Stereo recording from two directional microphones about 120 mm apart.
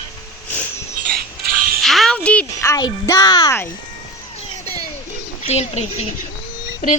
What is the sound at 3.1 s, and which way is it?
Speech, 25° left (ahead or behind).